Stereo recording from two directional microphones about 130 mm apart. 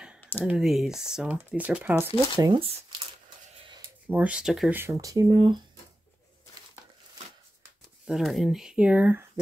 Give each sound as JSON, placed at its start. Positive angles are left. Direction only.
{"t": 0.2, "sound": "a sound", "side_deg": 15}
{"t": 0.5, "sound": "speech", "side_deg": -5}
{"t": 2.3, "sound": "speech", "side_deg": -35}
{"t": 4.1, "sound": "speech", "side_deg": -10}
{"t": 4.7, "sound": "speech", "side_deg": -25}
{"t": 8.1, "sound": "speech", "side_deg": 0}